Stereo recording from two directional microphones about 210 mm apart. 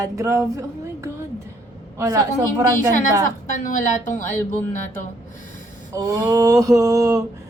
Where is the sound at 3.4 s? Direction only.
35° left (ahead or behind).